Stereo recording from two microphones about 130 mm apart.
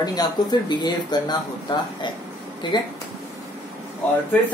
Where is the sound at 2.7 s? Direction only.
35° left (ahead or behind).